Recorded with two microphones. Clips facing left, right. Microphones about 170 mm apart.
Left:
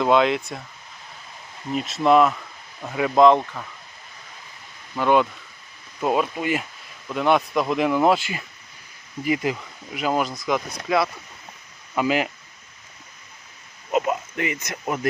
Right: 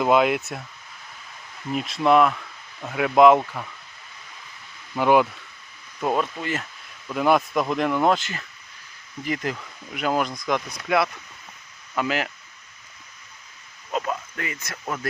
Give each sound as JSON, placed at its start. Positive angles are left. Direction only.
{"t": 0.0, "sound": "speech", "side_deg": -5}
{"t": 1.7, "sound": "speech", "side_deg": 0}
{"t": 4.9, "sound": "speech", "side_deg": -10}
{"t": 6.0, "sound": "speech", "side_deg": 5}
{"t": 7.1, "sound": "speech", "side_deg": 0}
{"t": 13.9, "sound": "speech", "side_deg": 20}